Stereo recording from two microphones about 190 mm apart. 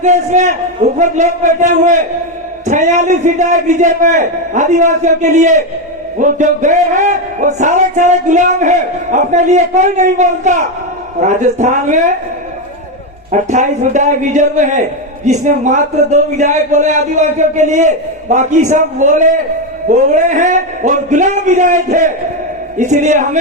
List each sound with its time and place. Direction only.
0.0 s a man's voice: 40° right (ahead or behind)
13.3 s a man's voice: 40° right (ahead or behind)